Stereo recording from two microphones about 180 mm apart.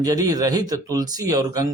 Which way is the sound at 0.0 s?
20° right (ahead or behind).